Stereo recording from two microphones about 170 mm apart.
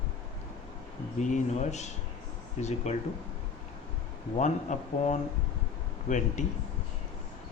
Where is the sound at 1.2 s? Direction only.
45° left (ahead or behind).